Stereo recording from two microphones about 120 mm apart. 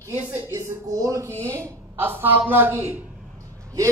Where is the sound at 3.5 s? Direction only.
25° right (ahead or behind).